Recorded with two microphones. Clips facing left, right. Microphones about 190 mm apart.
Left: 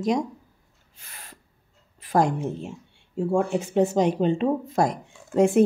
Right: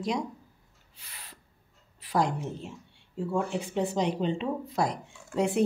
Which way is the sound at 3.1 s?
50° left (ahead or behind).